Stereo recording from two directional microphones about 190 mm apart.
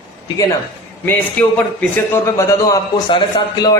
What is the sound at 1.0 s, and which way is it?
A man's voice, 10° left (ahead or behind).